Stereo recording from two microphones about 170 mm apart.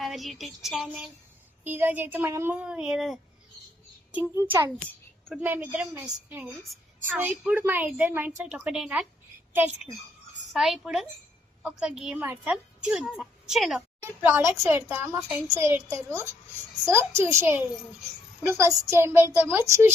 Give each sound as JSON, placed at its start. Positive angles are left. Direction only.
{"t": 0.0, "sound": "a woman's voice", "side_deg": 0}
{"t": 10.5, "sound": "a woman's voice", "side_deg": 0}
{"t": 14.0, "sound": "a woman's voice", "side_deg": -15}